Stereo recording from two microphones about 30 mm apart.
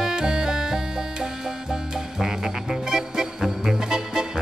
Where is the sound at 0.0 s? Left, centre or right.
Right.